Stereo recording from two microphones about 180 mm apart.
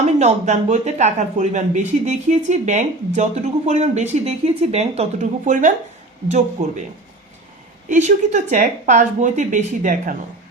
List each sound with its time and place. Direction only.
0.0 s speech: 40° right (ahead or behind)
7.9 s speech: 40° right (ahead or behind)